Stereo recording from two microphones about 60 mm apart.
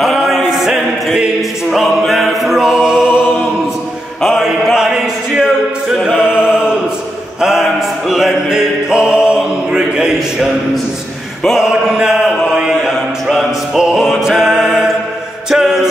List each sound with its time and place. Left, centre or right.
0.0 s a capella: centre
4.2 s mantra: centre
4.7 s music: centre
11.5 s mantra: centre
12.2 s chant: centre
12.5 s chant: centre
12.9 s a sound: centre
13.7 s music: centre